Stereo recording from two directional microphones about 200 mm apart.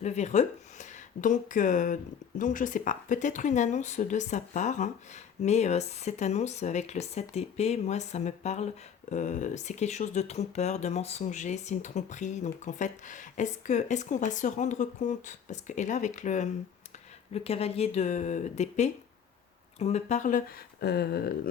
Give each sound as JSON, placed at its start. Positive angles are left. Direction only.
{"t": 0.0, "sound": "speech", "side_deg": 35}